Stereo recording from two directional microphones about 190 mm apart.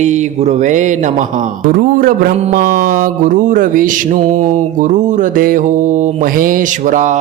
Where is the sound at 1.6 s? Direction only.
50° right (ahead or behind).